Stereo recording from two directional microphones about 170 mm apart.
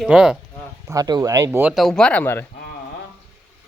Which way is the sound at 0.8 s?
20° right (ahead or behind).